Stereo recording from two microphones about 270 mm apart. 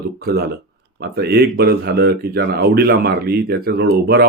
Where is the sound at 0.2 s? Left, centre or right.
Right.